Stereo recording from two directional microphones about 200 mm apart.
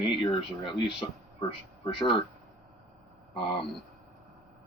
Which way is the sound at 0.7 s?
25° left (ahead or behind).